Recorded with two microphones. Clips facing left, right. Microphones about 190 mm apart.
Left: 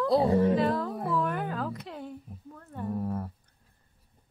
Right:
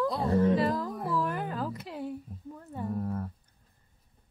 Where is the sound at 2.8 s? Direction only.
10° left (ahead or behind).